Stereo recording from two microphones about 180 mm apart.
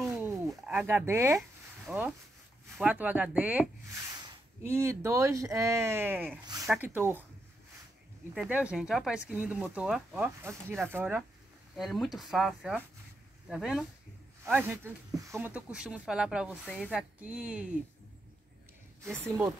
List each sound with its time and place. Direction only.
0.1 s a sound: 15° right (ahead or behind)
0.5 s speech: 5° right (ahead or behind)
1.9 s speech: 5° right (ahead or behind)
4.1 s speech: 20° right (ahead or behind)
6.4 s speech: 20° right (ahead or behind)
6.7 s speech: 10° right (ahead or behind)
8.4 s speech: 5° right (ahead or behind)
11.7 s speech: centre (ahead or behind)
14.4 s speech: 15° right (ahead or behind)
16.6 s speech: 5° left (ahead or behind)
17.2 s speech: 5° right (ahead or behind)
19.2 s speech: 15° right (ahead or behind)